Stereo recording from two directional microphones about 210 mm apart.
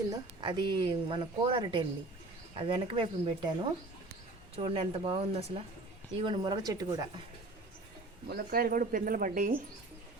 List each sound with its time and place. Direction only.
0.1 s a woman's voice: 20° right (ahead or behind)
4.5 s a woman's voice: 25° right (ahead or behind)
8.3 s speech: 45° right (ahead or behind)